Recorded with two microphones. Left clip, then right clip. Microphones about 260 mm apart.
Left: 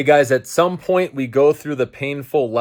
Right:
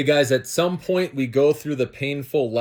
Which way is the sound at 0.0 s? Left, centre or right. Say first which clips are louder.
Left 5 dB; centre.